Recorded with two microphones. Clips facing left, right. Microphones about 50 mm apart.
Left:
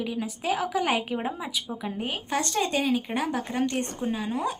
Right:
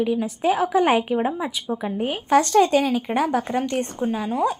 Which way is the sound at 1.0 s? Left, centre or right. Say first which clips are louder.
Right 7 dB; centre.